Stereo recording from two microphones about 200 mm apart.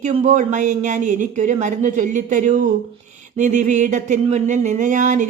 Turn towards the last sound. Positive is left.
turn(degrees=-40)  # may be behind; listen again after turning